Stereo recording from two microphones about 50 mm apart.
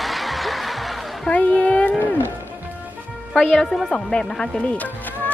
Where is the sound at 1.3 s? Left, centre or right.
Left.